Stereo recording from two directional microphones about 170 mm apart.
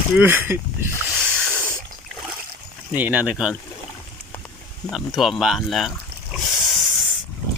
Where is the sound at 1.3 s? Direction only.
5° left (ahead or behind).